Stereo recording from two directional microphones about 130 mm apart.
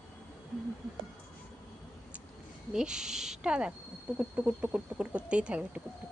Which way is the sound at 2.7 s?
5° right (ahead or behind).